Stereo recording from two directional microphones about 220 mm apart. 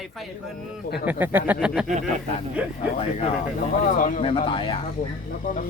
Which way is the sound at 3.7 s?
35° left (ahead or behind).